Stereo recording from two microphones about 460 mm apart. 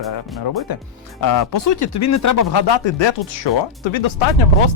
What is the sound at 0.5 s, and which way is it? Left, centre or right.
Speech, left.